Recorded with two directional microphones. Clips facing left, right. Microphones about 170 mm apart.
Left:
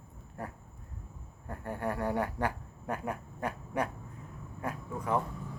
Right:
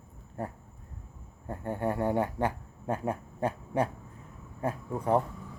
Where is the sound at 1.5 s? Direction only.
25° right (ahead or behind).